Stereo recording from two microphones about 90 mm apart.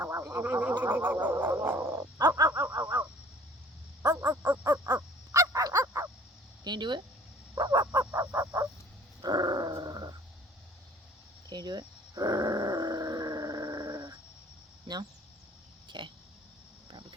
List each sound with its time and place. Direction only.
0.0 s a sound: 30° right (ahead or behind)
4.0 s a sound: 45° right (ahead or behind)
5.3 s dog: 40° right (ahead or behind)
6.7 s speech: 55° right (ahead or behind)
7.5 s frog: 50° right (ahead or behind)
7.9 s frog: 35° right (ahead or behind)
9.2 s dog: 50° right (ahead or behind)
11.4 s grunt: 50° right (ahead or behind)
15.9 s a sound: 60° right (ahead or behind)